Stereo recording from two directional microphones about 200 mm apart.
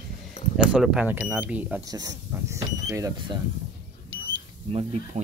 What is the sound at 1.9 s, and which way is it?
Speech, 15° right (ahead or behind).